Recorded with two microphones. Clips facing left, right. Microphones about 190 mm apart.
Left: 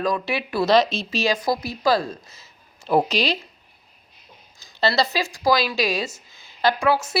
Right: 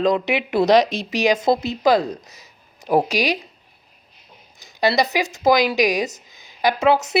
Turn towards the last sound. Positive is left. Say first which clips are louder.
# right 3 dB
turn(degrees=-20)  # may be behind; listen again after turning